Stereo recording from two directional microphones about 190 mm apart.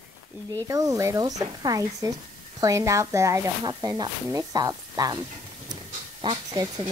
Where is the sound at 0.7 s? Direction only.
15° right (ahead or behind).